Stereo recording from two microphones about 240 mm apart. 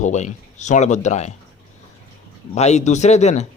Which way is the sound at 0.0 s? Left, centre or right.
Left.